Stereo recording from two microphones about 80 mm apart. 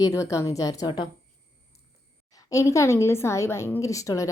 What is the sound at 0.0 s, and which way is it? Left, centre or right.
Speech, left.